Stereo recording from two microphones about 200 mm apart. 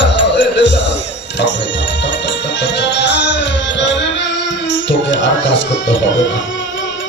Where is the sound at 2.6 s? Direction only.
60° left (ahead or behind).